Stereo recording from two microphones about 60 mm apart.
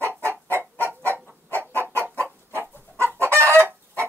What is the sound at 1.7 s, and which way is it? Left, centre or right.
Chicken, right.